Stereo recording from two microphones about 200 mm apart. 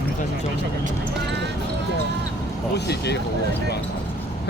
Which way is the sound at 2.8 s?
55° left (ahead or behind).